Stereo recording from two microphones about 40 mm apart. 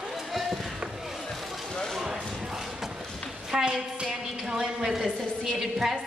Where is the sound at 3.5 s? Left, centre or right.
Centre.